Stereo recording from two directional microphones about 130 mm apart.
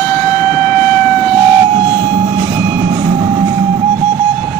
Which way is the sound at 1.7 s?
30° right (ahead or behind).